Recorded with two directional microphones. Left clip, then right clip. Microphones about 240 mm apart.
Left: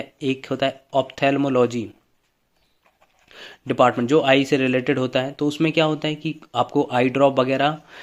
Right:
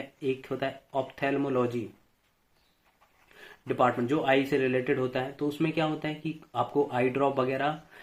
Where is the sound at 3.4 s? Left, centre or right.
Left.